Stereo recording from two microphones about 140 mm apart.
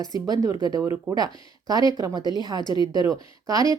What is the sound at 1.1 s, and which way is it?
Speech, 25° right (ahead or behind).